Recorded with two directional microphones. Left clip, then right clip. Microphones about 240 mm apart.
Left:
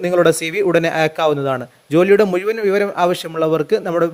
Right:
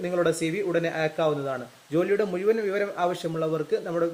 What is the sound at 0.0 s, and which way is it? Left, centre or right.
A man's voice, left.